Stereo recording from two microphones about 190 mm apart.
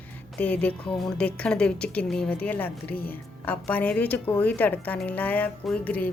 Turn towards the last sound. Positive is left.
turn(degrees=10)  # may be behind; listen again after turning